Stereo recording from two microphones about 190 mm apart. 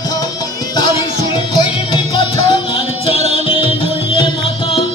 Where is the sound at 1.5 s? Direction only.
20° left (ahead or behind).